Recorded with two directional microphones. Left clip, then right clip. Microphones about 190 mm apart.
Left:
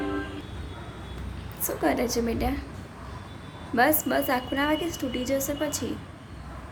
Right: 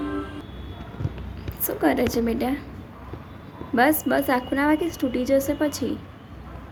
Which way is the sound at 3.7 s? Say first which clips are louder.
Right 3 dB; 20° right (ahead or behind).